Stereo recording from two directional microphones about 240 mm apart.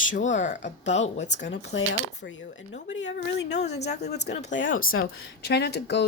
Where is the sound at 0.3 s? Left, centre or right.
Left.